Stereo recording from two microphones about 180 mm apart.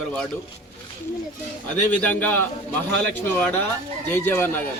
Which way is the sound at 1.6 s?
10° left (ahead or behind).